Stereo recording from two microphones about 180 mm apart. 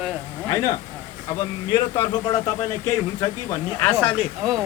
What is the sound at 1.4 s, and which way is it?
Speech, 25° left (ahead or behind).